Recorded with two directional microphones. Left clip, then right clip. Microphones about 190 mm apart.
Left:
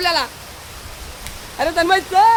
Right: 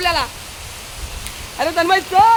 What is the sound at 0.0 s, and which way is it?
Speech, 5° left (ahead or behind).